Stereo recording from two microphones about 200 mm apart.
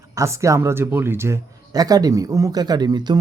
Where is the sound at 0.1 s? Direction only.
15° right (ahead or behind).